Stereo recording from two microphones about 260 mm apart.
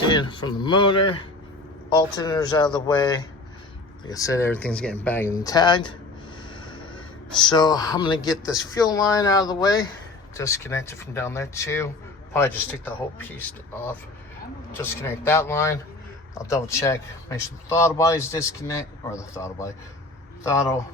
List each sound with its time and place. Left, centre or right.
0.1 s speech: centre
6.5 s vehicle: centre
7.3 s speech: centre